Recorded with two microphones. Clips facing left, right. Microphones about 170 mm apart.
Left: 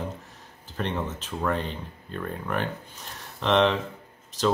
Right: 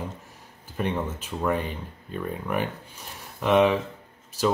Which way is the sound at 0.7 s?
10° right (ahead or behind).